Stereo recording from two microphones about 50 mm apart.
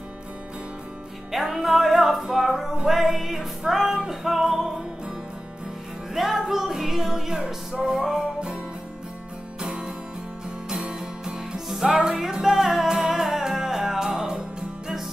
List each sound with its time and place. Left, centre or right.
1.3 s music: centre
6.1 s music: centre
7.3 s music: centre
9.6 s music: centre
10.9 s music: centre